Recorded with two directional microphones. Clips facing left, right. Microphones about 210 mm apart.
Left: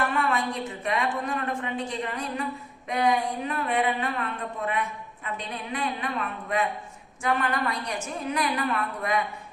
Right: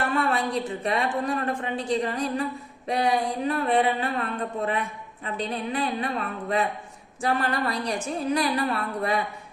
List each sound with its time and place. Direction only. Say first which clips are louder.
0.1 s a sound: right 2 dB; 35° right (ahead or behind)
0.9 s speech: right 1 dB; 35° right (ahead or behind)
7.2 s speech: right 1 dB; 35° right (ahead or behind)